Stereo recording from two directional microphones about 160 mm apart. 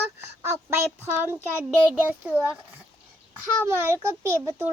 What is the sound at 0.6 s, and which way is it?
A child's voice, 15° right (ahead or behind).